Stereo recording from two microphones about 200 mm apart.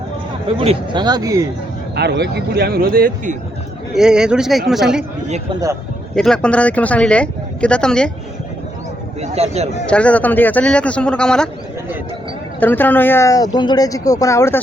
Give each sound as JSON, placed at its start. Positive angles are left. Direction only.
{"t": 0.4, "sound": "speech", "side_deg": -30}
{"t": 2.0, "sound": "speech", "side_deg": -55}
{"t": 3.9, "sound": "speech", "side_deg": -5}
{"t": 6.1, "sound": "speech", "side_deg": 5}
{"t": 9.2, "sound": "speech", "side_deg": -30}
{"t": 9.8, "sound": "speech", "side_deg": 5}
{"t": 12.5, "sound": "speech", "side_deg": 10}